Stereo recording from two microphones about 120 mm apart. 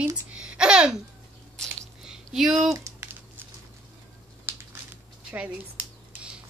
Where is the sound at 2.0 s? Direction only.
5° right (ahead or behind).